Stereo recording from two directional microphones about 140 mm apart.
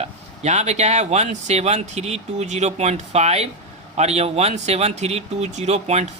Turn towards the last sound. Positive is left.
turn(degrees=-50)  # may be behind; listen again after turning